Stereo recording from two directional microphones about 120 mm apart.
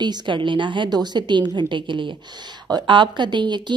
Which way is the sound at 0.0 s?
40° right (ahead or behind).